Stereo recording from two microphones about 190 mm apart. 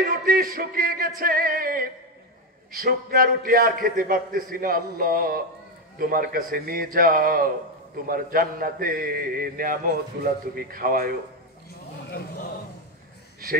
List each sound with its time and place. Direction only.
0.0 s mantra: 50° right (ahead or behind)